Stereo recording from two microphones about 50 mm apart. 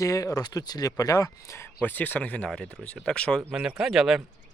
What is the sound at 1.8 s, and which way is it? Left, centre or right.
Speech, left.